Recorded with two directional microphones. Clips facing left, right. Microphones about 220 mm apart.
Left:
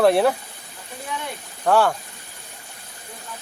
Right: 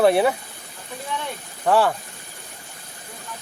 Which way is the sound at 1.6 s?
Centre (ahead or behind).